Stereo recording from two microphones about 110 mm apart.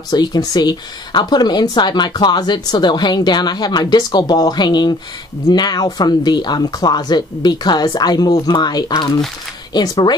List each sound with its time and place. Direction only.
0.1 s speech: 40° left (ahead or behind)